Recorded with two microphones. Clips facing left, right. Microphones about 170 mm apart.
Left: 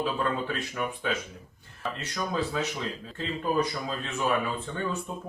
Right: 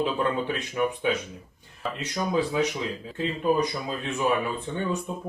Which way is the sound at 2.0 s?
15° right (ahead or behind).